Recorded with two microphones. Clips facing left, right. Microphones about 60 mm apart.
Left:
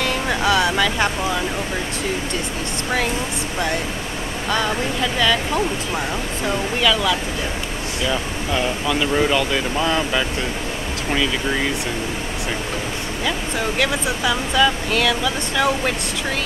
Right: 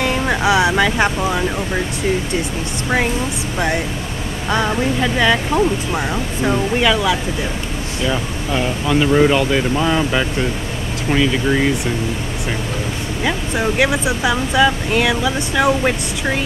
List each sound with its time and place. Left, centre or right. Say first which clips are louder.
0.0 s speech: right 3 dB; centre
5.0 s speech: right 2 dB; right
8.0 s speech: right 2 dB; centre
13.2 s speech: right 4 dB; centre